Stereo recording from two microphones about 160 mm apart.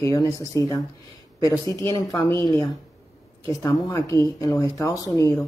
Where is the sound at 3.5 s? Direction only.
20° left (ahead or behind).